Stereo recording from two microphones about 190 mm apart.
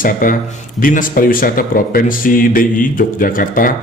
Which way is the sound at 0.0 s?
45° left (ahead or behind).